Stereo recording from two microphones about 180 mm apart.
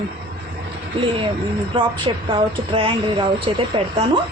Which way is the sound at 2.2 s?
30° right (ahead or behind).